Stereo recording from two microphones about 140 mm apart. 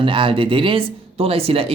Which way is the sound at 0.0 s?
40° right (ahead or behind).